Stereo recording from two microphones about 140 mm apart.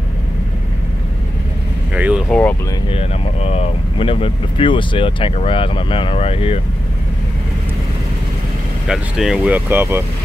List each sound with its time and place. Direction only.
2.0 s a sound: 10° right (ahead or behind)
2.2 s speech: 10° left (ahead or behind)
2.9 s speech: 45° left (ahead or behind)
8.8 s speech: 5° right (ahead or behind)
9.7 s speech: 15° right (ahead or behind)